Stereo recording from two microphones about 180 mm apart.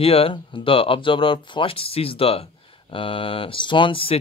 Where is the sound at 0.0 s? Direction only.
30° left (ahead or behind).